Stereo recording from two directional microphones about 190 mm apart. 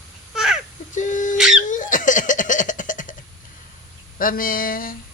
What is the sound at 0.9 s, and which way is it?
Bird, 40° left (ahead or behind).